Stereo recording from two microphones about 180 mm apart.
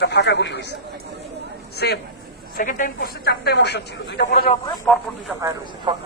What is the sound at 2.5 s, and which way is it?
A man's voice, 50° left (ahead or behind).